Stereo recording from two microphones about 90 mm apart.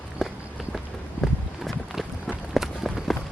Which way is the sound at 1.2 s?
Centre (ahead or behind).